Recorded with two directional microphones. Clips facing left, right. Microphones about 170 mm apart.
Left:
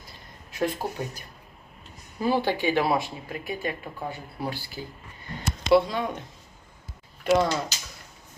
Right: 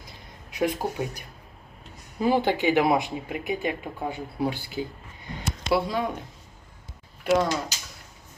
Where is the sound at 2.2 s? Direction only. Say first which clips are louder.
Right 2 dB; 15° right (ahead or behind).